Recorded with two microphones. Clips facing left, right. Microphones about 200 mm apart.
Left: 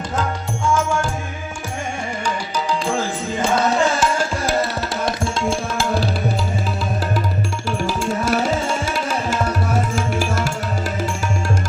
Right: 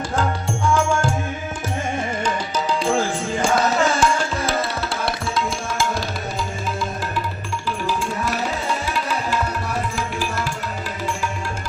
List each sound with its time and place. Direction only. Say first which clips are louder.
4.0 s tabla: even; 5° left (ahead or behind)
5.0 s music: left 4 dB; 25° left (ahead or behind)
7.9 s music: left 4 dB; 80° left
8.4 s music: left 4 dB; 40° left (ahead or behind)